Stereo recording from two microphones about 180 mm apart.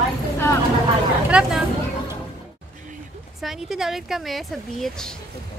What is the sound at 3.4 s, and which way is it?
Speech, centre (ahead or behind).